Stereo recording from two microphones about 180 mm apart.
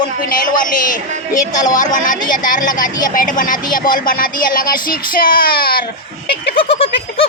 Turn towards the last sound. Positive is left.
turn(degrees=30)  # may be behind; listen again after turning